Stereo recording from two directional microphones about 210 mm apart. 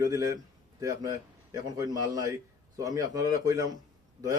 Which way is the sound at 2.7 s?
15° right (ahead or behind).